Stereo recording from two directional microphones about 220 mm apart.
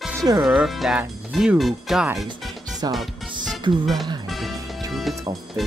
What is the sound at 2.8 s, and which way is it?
Music, 20° right (ahead or behind).